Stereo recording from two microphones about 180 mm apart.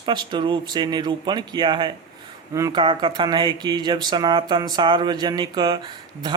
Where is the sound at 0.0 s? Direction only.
25° right (ahead or behind).